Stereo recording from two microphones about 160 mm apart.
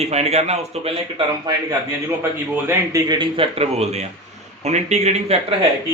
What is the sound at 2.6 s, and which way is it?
A man's voice, 20° right (ahead or behind).